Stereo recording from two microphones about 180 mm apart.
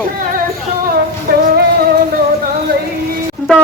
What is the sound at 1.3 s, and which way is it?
Music, 55° right (ahead or behind).